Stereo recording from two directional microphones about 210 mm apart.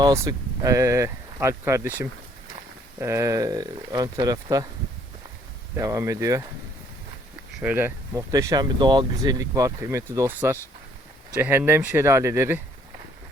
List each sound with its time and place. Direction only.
0.0 s speech: 15° right (ahead or behind)
5.7 s speech: 15° right (ahead or behind)
7.6 s speech: 5° right (ahead or behind)